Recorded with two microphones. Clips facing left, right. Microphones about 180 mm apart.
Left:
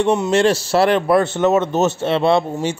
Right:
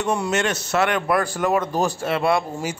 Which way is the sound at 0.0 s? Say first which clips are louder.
Left 7 dB; 25° left (ahead or behind).